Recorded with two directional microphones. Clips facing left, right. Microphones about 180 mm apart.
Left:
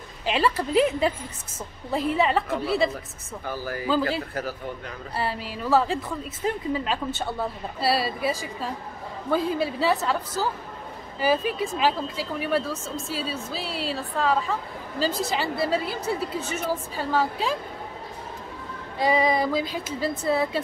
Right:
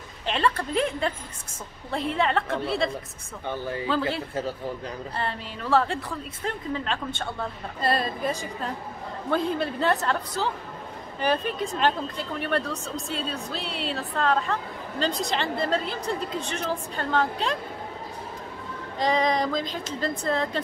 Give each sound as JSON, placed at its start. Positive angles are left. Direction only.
{"t": 0.2, "sound": "speech", "side_deg": 5}
{"t": 3.4, "sound": "speech", "side_deg": -25}
{"t": 5.1, "sound": "speech", "side_deg": 5}
{"t": 18.9, "sound": "speech", "side_deg": 10}